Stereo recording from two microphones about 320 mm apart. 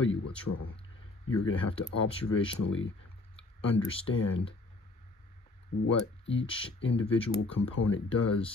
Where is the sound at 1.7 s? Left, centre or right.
Centre.